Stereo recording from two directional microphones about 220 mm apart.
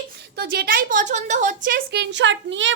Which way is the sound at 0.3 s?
45° right (ahead or behind).